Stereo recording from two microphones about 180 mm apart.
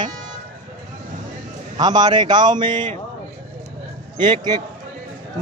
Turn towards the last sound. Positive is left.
turn(degrees=-25)  # may be behind; listen again after turning